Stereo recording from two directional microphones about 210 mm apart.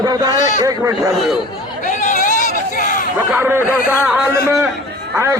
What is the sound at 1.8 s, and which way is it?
Chatter, 35° left (ahead or behind).